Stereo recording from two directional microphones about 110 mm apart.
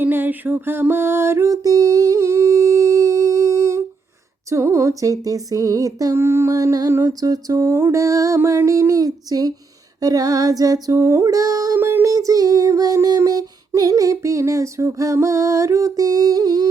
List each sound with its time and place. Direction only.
0.0 s music: 20° right (ahead or behind)
4.4 s child singing: 25° right (ahead or behind)
7.2 s music: 35° right (ahead or behind)
10.0 s child singing: 35° right (ahead or behind)
11.8 s a sound: 20° right (ahead or behind)
12.0 s child singing: 30° right (ahead or behind)